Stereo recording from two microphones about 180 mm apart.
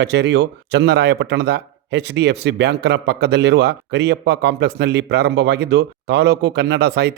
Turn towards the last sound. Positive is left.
turn(degrees=-65)  # may be behind; listen again after turning